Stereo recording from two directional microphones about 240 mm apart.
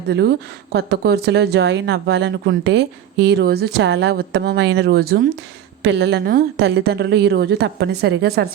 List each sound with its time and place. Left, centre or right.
0.1 s speech: right